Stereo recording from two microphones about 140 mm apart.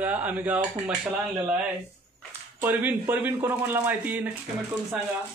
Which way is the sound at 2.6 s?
15° right (ahead or behind).